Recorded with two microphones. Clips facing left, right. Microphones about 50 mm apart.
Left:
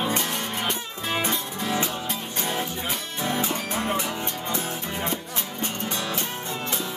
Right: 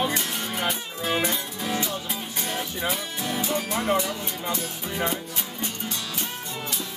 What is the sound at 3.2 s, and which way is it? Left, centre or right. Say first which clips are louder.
Music: left 6 dB; left.